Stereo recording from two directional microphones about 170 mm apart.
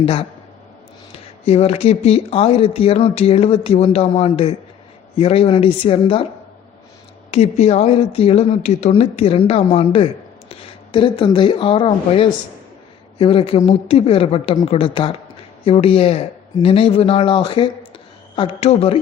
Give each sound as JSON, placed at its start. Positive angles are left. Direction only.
{"t": 0.0, "sound": "speech", "side_deg": 30}
{"t": 1.5, "sound": "speech", "side_deg": 35}
{"t": 7.3, "sound": "speech", "side_deg": 40}